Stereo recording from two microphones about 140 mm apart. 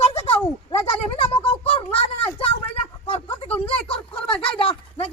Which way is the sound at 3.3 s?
10° left (ahead or behind).